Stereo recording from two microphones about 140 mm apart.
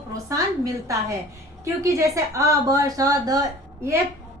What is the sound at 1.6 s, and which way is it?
A woman's voice, 20° right (ahead or behind).